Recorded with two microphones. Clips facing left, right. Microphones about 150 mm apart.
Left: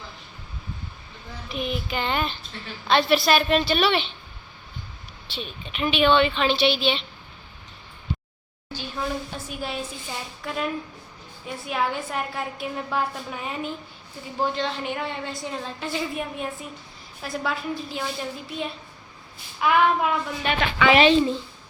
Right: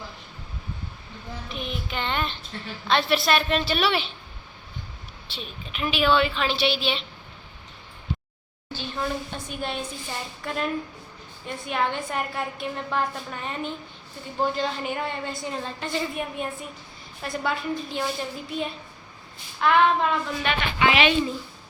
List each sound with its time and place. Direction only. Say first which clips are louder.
1.5 s a woman's voice: left 6 dB; 5° left (ahead or behind)
5.3 s a woman's voice: left 3 dB; centre (ahead or behind)
8.7 s a woman's voice: even; 10° left (ahead or behind)
19.5 s a sound: even; 5° left (ahead or behind)
20.9 s a woman's voice: left 5 dB; 35° left (ahead or behind)